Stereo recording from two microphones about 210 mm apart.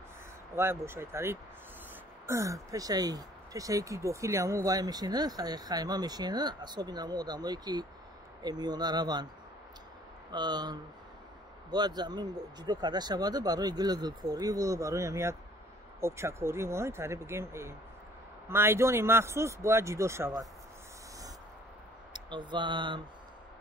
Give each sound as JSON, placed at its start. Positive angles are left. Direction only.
{"t": 0.6, "sound": "speech", "side_deg": -10}
{"t": 10.3, "sound": "speech", "side_deg": -20}
{"t": 22.1, "sound": "speech", "side_deg": -20}